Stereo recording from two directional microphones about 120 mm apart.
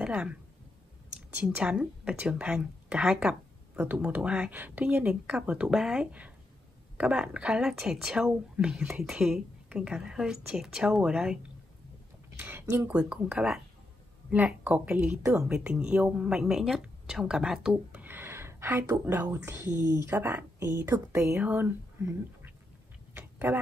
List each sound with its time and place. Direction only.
0.0 s speech: 10° right (ahead or behind)
1.4 s a woman's voice: 5° right (ahead or behind)
12.4 s a woman's voice: 15° right (ahead or behind)
12.9 s a woman's voice: 10° right (ahead or behind)
18.0 s a sound: 20° right (ahead or behind)
19.0 s a woman's voice: 15° right (ahead or behind)
21.4 s speech: 15° right (ahead or behind)
23.1 s tick-tock: 15° right (ahead or behind)